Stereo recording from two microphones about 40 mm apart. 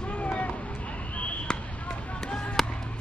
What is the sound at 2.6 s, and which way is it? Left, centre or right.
Music, centre.